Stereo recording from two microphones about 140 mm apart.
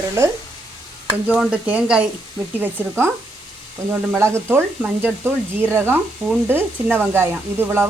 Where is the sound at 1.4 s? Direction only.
10° right (ahead or behind).